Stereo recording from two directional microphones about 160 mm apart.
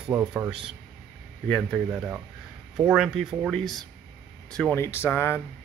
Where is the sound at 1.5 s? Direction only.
Centre (ahead or behind).